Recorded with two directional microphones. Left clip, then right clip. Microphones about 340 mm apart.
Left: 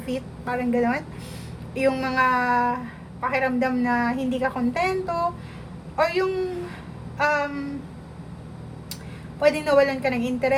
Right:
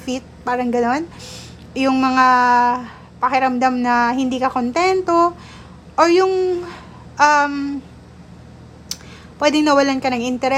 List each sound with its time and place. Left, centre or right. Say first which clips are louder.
0.0 s a woman's voice: right 5 dB; centre
9.6 s a woman's voice: right 5 dB; centre